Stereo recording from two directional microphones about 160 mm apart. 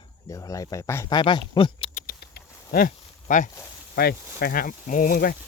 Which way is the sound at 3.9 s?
70° left (ahead or behind).